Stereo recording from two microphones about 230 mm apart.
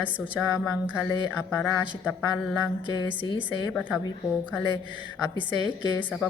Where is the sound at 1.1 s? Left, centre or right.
Centre.